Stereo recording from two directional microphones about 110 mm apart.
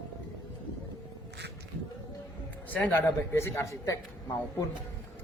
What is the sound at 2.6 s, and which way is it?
A man's voice, 15° left (ahead or behind).